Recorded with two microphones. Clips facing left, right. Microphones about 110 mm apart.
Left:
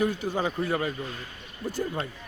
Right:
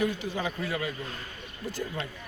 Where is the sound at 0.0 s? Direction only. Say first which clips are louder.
Left 3 dB; 40° left (ahead or behind).